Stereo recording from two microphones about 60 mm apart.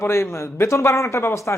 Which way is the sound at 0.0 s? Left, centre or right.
Left.